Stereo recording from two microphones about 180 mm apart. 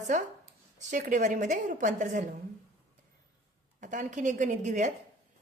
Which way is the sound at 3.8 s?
45° right (ahead or behind).